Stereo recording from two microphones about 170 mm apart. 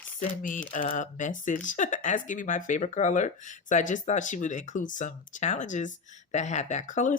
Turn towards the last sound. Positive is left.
turn(degrees=45)  # may be behind; listen again after turning